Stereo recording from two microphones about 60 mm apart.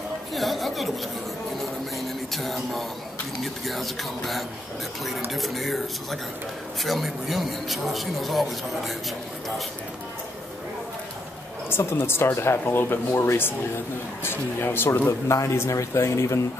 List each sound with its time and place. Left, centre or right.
0.3 s a sound: centre
3.6 s speech: centre
11.7 s speech: left
15.0 s speech: left